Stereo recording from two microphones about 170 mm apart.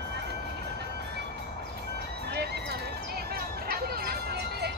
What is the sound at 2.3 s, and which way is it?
Music, 70° right (ahead or behind).